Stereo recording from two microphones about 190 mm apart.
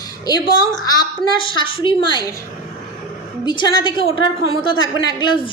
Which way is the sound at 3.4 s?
25° left (ahead or behind).